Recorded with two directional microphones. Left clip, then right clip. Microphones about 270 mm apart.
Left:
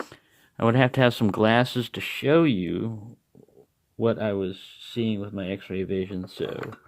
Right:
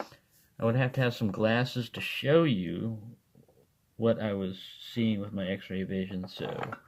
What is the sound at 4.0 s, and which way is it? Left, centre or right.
Speech, left.